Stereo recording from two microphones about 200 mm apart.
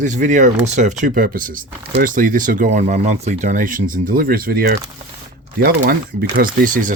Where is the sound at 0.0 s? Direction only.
40° right (ahead or behind).